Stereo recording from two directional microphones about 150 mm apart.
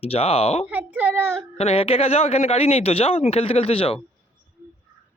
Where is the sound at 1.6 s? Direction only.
40° left (ahead or behind).